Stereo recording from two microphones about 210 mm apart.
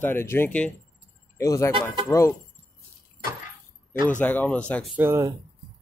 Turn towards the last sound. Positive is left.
turn(degrees=-10)  # may be behind; listen again after turning